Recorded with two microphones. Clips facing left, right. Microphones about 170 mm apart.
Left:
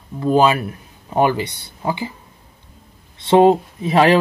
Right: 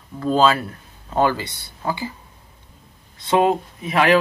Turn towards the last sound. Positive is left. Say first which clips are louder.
# left 4 dB
turn(degrees=30)  # may be behind; listen again after turning